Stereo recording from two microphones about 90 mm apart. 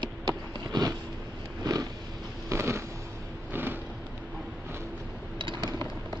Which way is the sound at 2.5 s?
30° right (ahead or behind).